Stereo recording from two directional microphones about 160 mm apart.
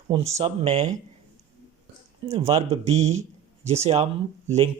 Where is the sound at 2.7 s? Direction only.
40° right (ahead or behind).